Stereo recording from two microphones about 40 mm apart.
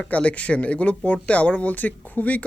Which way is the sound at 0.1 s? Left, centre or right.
Left.